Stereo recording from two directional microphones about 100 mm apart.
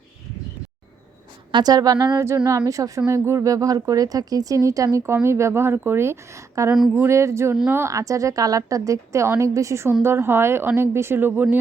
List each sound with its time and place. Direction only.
1.5 s speech: 40° right (ahead or behind); by 11.4 s 20° right (ahead or behind)